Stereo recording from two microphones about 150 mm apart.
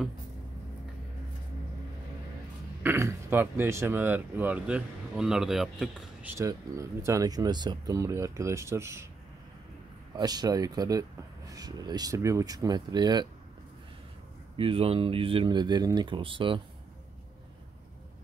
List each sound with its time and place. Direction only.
2.8 s speech: 15° right (ahead or behind)
6.2 s speech: 20° right (ahead or behind)
10.1 s speech: 25° right (ahead or behind)
14.6 s speech: 40° right (ahead or behind)